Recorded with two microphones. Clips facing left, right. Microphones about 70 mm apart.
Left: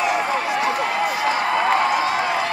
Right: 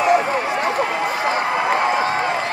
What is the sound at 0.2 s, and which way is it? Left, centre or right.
Run, centre.